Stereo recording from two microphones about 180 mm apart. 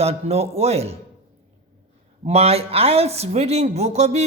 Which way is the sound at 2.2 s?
35° right (ahead or behind).